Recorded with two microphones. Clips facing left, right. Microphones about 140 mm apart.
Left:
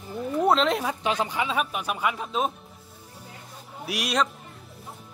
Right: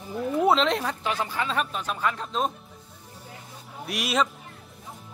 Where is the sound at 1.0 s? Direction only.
20° left (ahead or behind).